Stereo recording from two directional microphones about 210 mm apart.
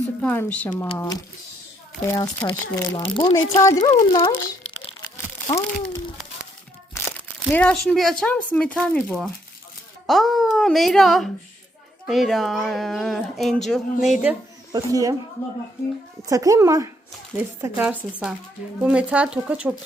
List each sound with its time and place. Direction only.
0.2 s speech: 10° left (ahead or behind)
5.1 s crumpling: 15° left (ahead or behind)
7.4 s speech: 5° left (ahead or behind)
14.7 s speech: 15° right (ahead or behind)
16.2 s speech: 15° right (ahead or behind)